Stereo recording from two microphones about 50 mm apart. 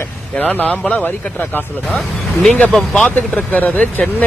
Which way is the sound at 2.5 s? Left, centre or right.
Left.